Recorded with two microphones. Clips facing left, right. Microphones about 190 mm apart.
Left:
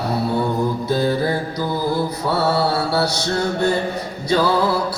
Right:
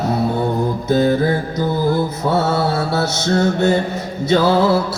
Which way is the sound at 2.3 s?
20° right (ahead or behind).